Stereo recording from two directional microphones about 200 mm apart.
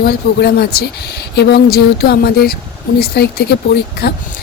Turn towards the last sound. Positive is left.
turn(degrees=55)  # may be behind; listen again after turning